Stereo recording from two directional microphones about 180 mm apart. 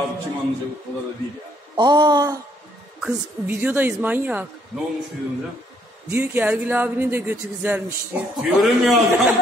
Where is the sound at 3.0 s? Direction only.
10° right (ahead or behind).